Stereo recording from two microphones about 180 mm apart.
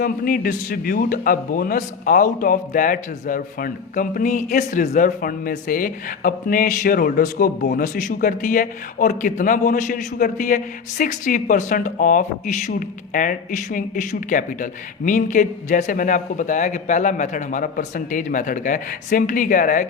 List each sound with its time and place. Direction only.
0.0 s a man's voice: 55° left (ahead or behind)